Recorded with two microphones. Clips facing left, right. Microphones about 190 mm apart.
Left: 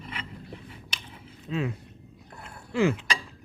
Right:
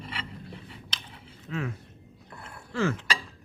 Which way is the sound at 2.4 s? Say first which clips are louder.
Left 4 dB; 15° left (ahead or behind).